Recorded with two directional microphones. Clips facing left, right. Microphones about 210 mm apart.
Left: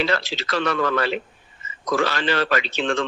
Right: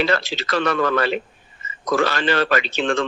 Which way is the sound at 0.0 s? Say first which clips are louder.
Right 2 dB; 50° right (ahead or behind).